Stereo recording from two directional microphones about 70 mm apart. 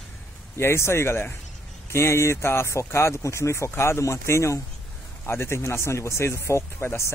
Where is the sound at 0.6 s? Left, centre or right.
Left.